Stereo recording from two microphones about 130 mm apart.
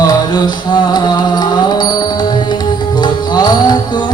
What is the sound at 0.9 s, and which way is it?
Music, 30° left (ahead or behind).